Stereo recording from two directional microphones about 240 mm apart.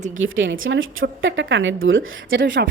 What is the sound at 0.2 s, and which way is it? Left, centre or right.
Speech, right.